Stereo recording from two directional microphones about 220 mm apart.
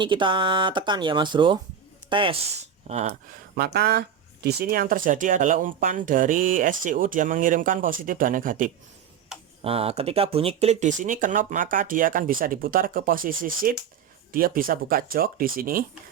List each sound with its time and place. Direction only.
0.0 s speech: 20° right (ahead or behind)
3.6 s speech: 45° right (ahead or behind)
9.6 s speech: 25° right (ahead or behind)